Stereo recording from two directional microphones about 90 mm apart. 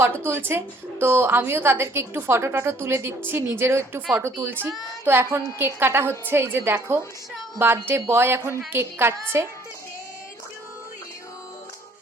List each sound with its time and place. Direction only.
0.0 s a woman's voice: 25° right (ahead or behind)